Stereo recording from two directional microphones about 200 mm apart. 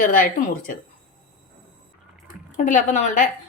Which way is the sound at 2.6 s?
40° left (ahead or behind).